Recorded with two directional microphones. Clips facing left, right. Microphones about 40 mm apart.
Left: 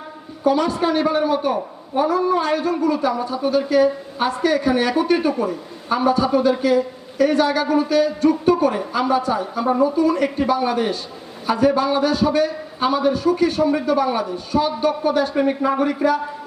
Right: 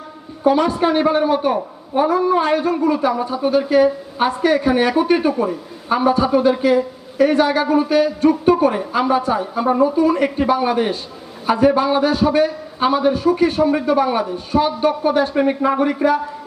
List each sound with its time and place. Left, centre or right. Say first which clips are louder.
0.4 s a man's voice: right 3 dB; right